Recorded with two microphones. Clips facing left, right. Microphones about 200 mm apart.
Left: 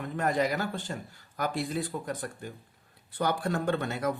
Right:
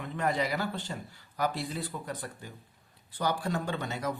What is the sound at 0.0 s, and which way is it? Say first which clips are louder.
Speech: left 3 dB; 45° left (ahead or behind).